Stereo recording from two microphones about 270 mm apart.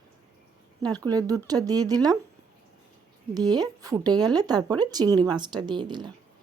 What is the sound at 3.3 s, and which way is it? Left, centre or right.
A woman's voice, centre.